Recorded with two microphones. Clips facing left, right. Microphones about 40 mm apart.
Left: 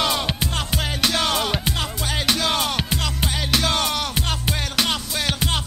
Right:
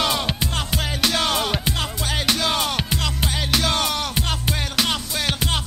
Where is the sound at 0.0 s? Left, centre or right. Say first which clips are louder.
Even; centre.